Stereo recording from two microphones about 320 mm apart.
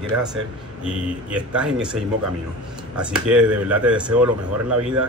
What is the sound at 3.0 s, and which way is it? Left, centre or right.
A man's voice, centre.